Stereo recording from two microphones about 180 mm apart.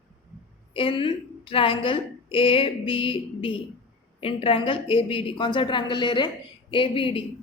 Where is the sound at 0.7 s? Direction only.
30° left (ahead or behind).